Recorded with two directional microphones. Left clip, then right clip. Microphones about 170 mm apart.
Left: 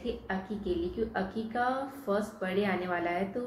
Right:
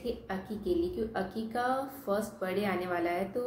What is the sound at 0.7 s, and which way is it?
A woman's voice, 15° right (ahead or behind).